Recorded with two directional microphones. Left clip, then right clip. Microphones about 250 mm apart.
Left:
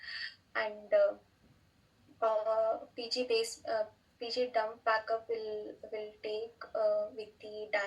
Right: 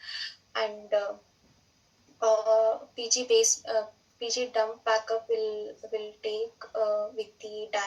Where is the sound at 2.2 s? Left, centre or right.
Centre.